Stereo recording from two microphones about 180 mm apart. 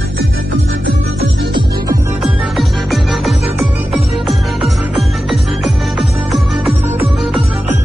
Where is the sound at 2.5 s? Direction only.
Centre (ahead or behind).